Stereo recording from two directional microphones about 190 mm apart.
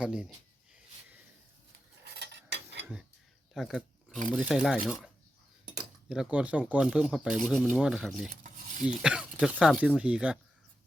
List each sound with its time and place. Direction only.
0.0 s speech: 5° right (ahead or behind)
2.1 s cutlery: 65° right (ahead or behind)
3.5 s dog: centre (ahead or behind)
4.4 s speech: 5° right (ahead or behind)
8.3 s stir: 45° right (ahead or behind)
8.9 s speech: 5° right (ahead or behind)